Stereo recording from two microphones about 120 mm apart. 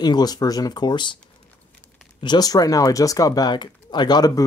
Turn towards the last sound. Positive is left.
turn(degrees=30)  # may be behind; listen again after turning